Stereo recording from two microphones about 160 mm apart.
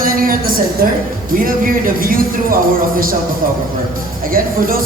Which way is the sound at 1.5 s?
60° right (ahead or behind).